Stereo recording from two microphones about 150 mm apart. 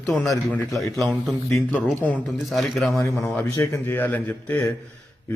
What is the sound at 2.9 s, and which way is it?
Speech, 20° left (ahead or behind).